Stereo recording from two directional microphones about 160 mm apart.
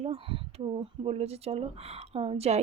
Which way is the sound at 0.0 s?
35° right (ahead or behind).